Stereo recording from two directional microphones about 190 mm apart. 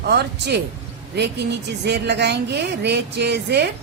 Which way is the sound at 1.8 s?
60° right (ahead or behind).